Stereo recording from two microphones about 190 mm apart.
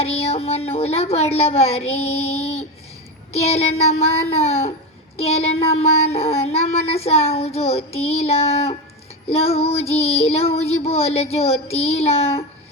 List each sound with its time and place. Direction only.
0.0 s child singing: 35° left (ahead or behind)